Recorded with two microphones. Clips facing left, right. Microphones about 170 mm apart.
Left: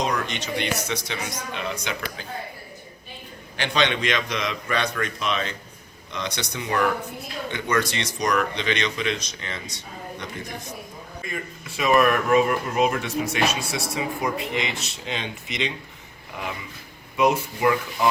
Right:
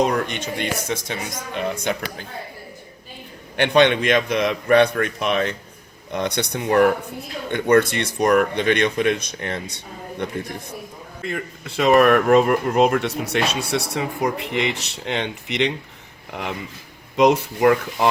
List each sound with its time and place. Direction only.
0.0 s speech: 55° right (ahead or behind)
3.6 s speech: 55° right (ahead or behind)